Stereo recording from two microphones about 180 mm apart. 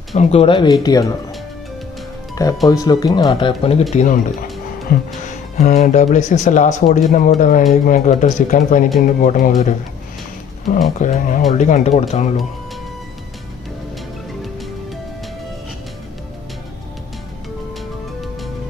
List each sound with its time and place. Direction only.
0.1 s speech: 35° left (ahead or behind)
2.4 s speech: 20° left (ahead or behind)
3.9 s speech: 45° left (ahead or behind)
4.9 s music: 55° left (ahead or behind)
5.6 s speech: 40° left (ahead or behind)
11.0 s speech: 45° left (ahead or behind)